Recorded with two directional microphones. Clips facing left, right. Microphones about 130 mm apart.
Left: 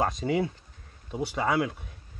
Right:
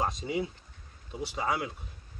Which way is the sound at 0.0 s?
60° left (ahead or behind).